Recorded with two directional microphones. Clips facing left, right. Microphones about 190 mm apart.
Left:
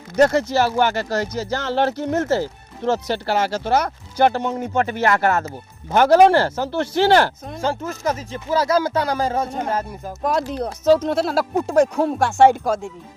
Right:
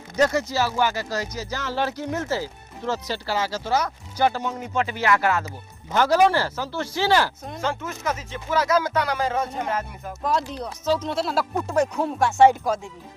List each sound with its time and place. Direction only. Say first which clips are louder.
0.2 s speech: left 5 dB; 60° left (ahead or behind)
7.6 s speech: left 5 dB; 35° left (ahead or behind)
10.2 s speech: left 4 dB; 50° left (ahead or behind)
11.9 s speech: left 2 dB; 30° left (ahead or behind)